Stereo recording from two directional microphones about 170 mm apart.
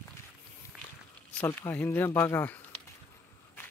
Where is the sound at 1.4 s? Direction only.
10° left (ahead or behind).